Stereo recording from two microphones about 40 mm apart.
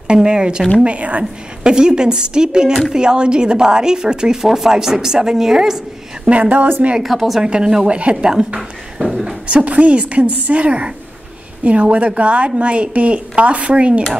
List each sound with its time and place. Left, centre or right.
0.1 s speech: right
0.8 s a woman's voice: right
1.6 s speech: right
4.4 s a woman's voice: centre
6.2 s a woman's voice: right
7.0 s speech: centre
7.4 s speech: right
7.9 s a woman's voice: right
9.5 s a woman's voice: right